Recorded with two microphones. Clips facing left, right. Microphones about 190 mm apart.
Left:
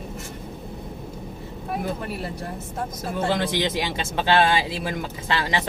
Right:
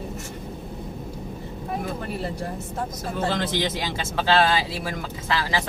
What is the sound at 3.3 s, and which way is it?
Speech, 15° left (ahead or behind).